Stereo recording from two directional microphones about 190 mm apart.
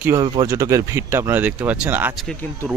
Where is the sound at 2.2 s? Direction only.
5° left (ahead or behind).